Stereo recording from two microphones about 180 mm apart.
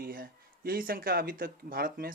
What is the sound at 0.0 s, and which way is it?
Speech, 55° right (ahead or behind).